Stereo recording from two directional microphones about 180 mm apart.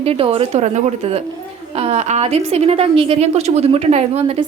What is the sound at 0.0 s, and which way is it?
A woman's voice, 35° right (ahead or behind).